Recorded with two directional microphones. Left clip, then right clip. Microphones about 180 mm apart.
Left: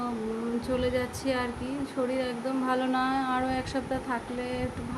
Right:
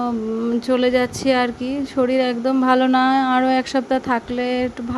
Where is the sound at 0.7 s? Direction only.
50° right (ahead or behind).